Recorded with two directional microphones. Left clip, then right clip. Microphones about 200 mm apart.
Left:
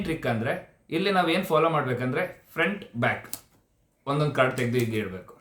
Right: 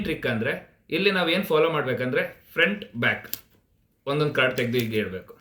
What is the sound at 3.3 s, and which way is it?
Speech, centre (ahead or behind).